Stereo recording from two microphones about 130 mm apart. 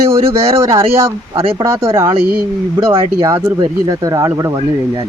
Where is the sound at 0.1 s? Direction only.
25° right (ahead or behind).